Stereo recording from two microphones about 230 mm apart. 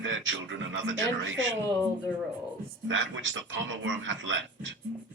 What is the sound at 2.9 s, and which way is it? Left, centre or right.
Speech, right.